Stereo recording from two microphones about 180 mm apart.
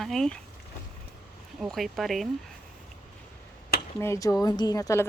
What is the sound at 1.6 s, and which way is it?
Speech, centre (ahead or behind).